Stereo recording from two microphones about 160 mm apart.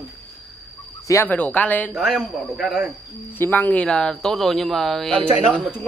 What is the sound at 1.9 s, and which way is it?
Speech, 5° right (ahead or behind).